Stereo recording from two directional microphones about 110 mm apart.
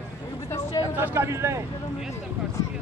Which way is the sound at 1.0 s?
25° right (ahead or behind).